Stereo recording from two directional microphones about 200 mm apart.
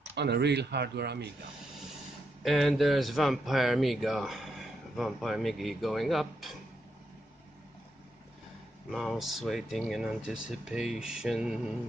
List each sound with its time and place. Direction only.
0.1 s speech: 55° right (ahead or behind)
2.4 s speech: centre (ahead or behind)
8.9 s speech: centre (ahead or behind)